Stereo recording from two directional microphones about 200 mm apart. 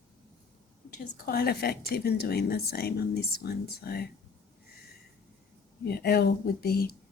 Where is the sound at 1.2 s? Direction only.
50° left (ahead or behind).